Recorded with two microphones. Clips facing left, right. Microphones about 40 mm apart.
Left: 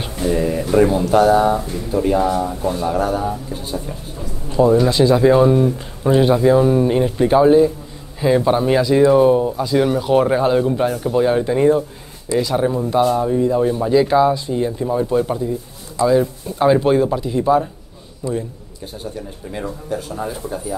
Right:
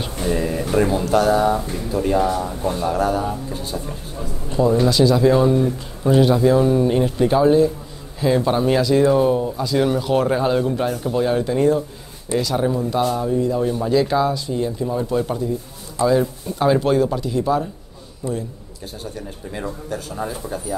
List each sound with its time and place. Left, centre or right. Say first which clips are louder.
0.2 s a man's voice: left 3 dB; centre
4.8 s speech: left 2 dB; left
19.5 s speech: left 3 dB; centre